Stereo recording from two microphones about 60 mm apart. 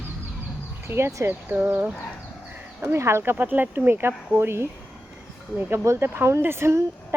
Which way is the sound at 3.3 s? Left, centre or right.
Right.